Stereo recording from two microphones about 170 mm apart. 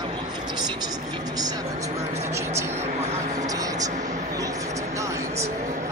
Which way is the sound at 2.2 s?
15° right (ahead or behind).